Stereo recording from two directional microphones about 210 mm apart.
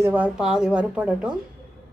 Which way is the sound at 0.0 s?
5° right (ahead or behind).